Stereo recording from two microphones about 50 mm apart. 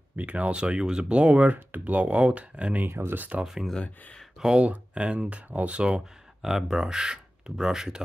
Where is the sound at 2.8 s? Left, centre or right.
Right.